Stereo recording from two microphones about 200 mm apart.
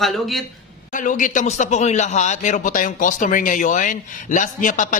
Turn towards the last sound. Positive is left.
turn(degrees=40)  # may be behind; listen again after turning